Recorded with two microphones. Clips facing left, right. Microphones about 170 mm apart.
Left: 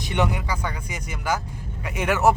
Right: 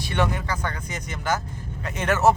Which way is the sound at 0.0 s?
15° left (ahead or behind).